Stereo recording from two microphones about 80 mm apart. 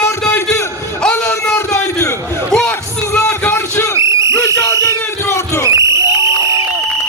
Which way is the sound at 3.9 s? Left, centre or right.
Right.